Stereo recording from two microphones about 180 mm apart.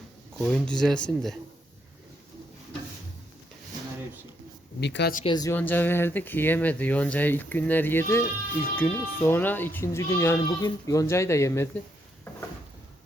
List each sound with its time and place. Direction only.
0.3 s speech: centre (ahead or behind)
4.8 s speech: 75° left (ahead or behind)
5.2 s speech: 25° left (ahead or behind)
5.5 s speech: 10° left (ahead or behind)